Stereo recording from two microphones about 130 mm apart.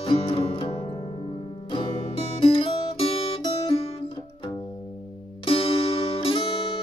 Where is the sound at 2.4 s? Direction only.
45° left (ahead or behind).